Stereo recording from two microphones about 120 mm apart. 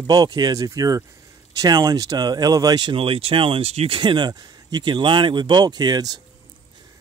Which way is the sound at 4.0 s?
40° right (ahead or behind).